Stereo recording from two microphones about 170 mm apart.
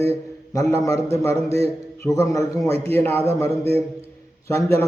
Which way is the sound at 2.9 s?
10° left (ahead or behind).